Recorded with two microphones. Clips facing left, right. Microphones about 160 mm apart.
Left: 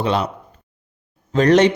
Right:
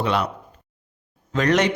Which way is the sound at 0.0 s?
30° left (ahead or behind).